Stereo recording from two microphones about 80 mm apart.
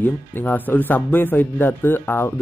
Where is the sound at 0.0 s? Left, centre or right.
Left.